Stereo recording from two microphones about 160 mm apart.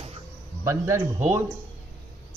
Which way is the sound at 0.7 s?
20° right (ahead or behind).